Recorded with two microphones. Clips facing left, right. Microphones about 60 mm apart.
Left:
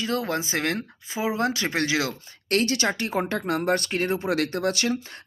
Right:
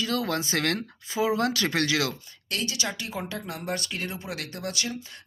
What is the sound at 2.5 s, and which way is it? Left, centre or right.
Speech, left.